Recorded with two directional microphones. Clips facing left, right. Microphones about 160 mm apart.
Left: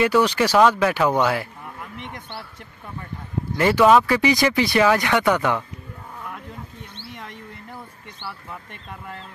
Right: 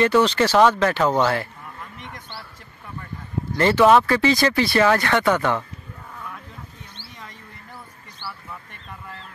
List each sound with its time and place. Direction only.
0.0 s speech: 10° left (ahead or behind)
3.5 s speech: 10° left (ahead or behind)
7.0 s mouse: 60° left (ahead or behind)